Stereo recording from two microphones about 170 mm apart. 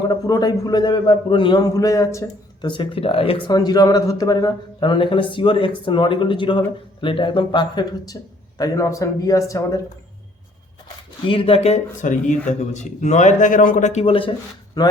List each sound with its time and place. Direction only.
0.1 s a man's voice: 20° left (ahead or behind)
11.3 s speech: 30° left (ahead or behind)
14.8 s a man's voice: 20° left (ahead or behind)